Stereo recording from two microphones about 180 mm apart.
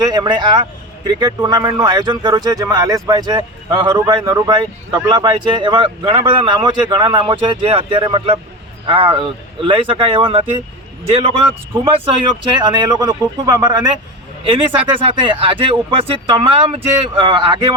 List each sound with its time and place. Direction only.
0.0 s a man's voice: 20° right (ahead or behind)